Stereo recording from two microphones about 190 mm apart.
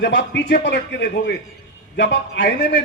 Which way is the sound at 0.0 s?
65° left (ahead or behind).